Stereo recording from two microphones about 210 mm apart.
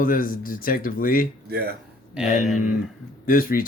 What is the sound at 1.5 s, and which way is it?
Speech, 50° right (ahead or behind).